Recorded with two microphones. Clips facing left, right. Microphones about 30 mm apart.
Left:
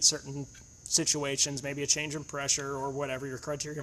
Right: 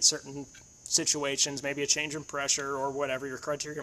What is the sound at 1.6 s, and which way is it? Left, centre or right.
Speech, centre.